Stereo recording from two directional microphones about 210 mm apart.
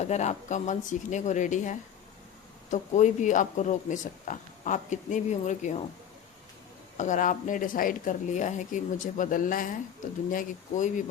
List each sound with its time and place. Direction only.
0.0 s speech: 35° left (ahead or behind)
6.9 s speech: 35° left (ahead or behind)